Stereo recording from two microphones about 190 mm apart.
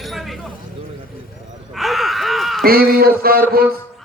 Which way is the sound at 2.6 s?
50° right (ahead or behind).